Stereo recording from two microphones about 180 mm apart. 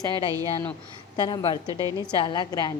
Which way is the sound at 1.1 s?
25° left (ahead or behind).